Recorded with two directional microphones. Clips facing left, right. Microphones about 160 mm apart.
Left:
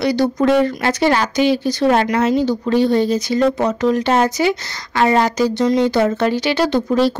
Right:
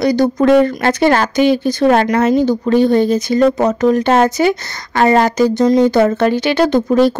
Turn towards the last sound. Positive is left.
turn(degrees=-50)  # may be behind; listen again after turning